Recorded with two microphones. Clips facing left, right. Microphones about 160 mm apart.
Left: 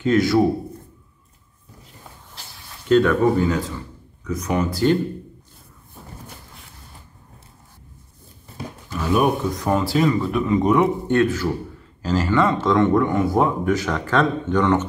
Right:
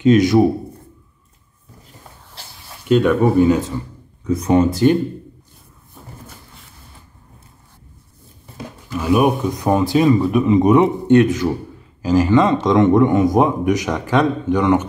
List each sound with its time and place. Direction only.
0.0 s speech: 20° right (ahead or behind)
2.9 s speech: 15° right (ahead or behind)
9.0 s speech: 10° right (ahead or behind)